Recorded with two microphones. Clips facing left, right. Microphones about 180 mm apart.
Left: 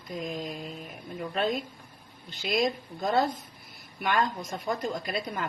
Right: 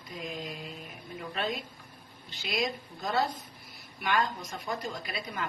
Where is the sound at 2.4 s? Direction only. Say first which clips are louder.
Left 5 dB; 50° left (ahead or behind).